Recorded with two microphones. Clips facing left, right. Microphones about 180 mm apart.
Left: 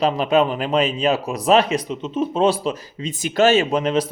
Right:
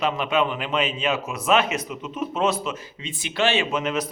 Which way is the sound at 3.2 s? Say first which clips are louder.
Left 7 dB; 40° left (ahead or behind).